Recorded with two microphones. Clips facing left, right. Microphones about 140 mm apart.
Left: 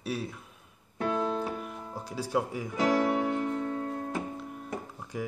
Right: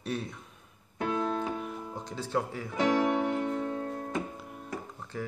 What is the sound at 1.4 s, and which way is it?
Music, 5° left (ahead or behind).